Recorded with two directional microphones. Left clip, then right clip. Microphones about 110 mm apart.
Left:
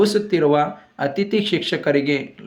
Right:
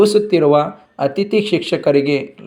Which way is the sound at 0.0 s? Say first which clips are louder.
Right 5 dB; 25° right (ahead or behind).